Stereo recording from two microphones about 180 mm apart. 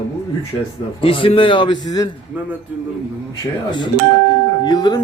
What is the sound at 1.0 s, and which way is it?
A man's voice, 30° left (ahead or behind).